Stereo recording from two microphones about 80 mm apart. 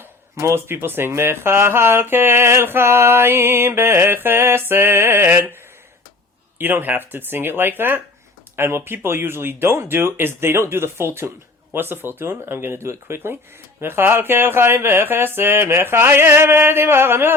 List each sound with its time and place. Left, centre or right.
0.0 s speech: right
6.6 s speech: right